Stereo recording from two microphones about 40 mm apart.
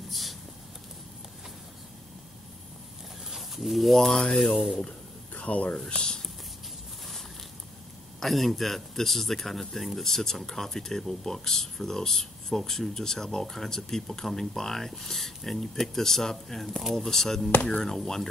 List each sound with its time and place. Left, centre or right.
0.1 s a sound: centre
3.3 s speech: centre
5.4 s speech: left
5.9 s speech: centre
8.2 s speech: centre
17.6 s speech: left
17.8 s speech: centre